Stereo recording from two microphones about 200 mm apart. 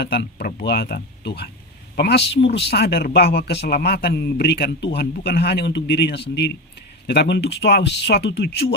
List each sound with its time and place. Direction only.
0.0 s a man's voice: 55° left (ahead or behind)